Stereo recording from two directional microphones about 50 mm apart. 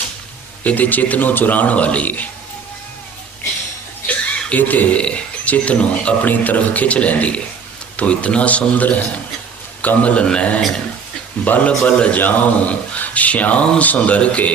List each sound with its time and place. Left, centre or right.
0.6 s a man's voice: left
4.0 s chuckle: left
4.5 s a man's voice: left
4.9 s a man's voice: left
11.4 s a man's voice: left